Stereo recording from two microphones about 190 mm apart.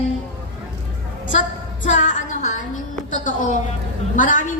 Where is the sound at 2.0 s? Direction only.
45° left (ahead or behind).